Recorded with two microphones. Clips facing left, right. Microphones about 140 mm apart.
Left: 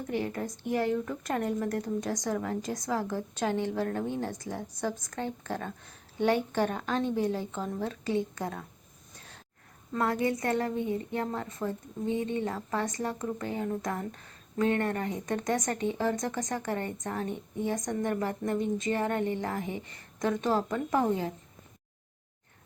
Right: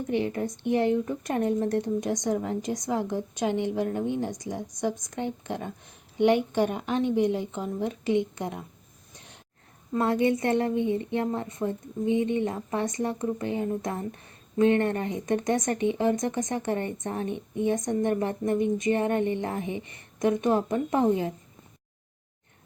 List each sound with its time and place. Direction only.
0.1 s speech: 20° right (ahead or behind)
10.0 s speech: 25° right (ahead or behind)